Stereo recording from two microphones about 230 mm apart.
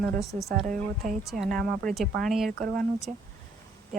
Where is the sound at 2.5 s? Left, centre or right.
Right.